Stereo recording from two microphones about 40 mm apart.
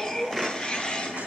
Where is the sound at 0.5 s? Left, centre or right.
Centre.